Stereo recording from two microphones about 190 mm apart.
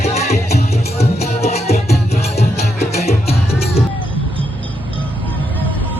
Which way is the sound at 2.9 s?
35° left (ahead or behind).